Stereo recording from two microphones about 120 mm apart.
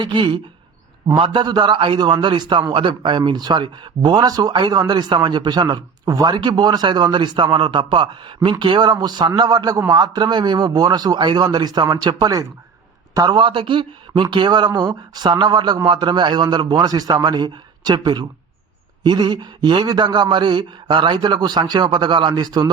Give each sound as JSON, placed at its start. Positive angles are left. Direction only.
{"t": 0.0, "sound": "a man's voice", "side_deg": -40}